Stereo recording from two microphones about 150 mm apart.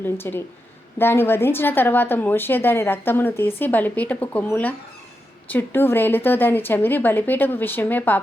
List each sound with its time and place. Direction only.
0.0 s a woman's voice: 15° left (ahead or behind)